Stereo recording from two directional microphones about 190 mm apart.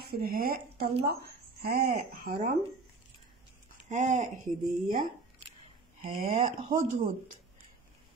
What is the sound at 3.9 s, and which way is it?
Speech, 40° right (ahead or behind).